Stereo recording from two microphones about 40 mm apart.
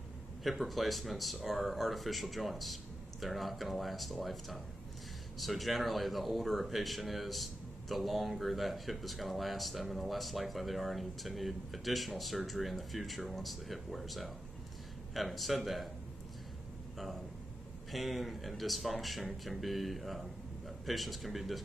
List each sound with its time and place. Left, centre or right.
0.4 s speech: centre
17.9 s speech: centre